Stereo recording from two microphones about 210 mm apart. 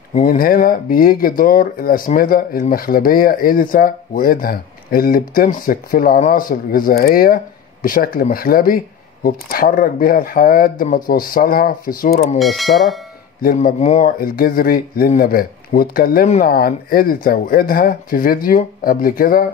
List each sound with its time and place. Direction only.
0.1 s speech: 40° left (ahead or behind)
12.4 s speech: centre (ahead or behind)
13.4 s speech: 45° left (ahead or behind)